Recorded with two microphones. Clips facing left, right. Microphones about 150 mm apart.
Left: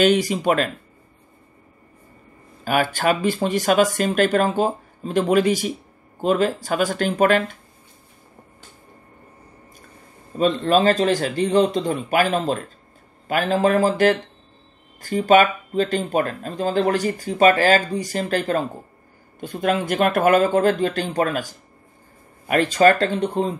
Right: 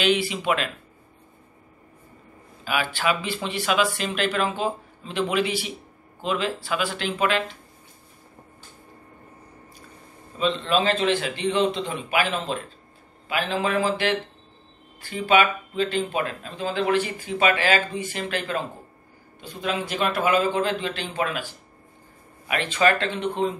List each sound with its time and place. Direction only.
0.0 s speech: 45° left (ahead or behind)
2.6 s speech: 45° left (ahead or behind)
10.3 s speech: 45° left (ahead or behind)